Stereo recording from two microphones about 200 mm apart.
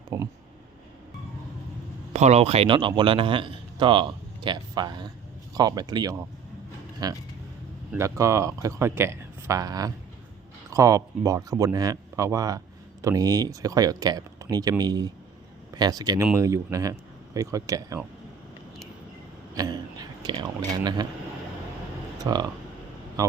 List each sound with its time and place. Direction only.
0.1 s a man's voice: 20° right (ahead or behind)
2.1 s a man's voice: 35° right (ahead or behind); by 18.0 s 15° right (ahead or behind)
19.5 s a sound: 20° right (ahead or behind)
20.8 s a man's voice: 20° right (ahead or behind)
22.2 s speech: 20° right (ahead or behind)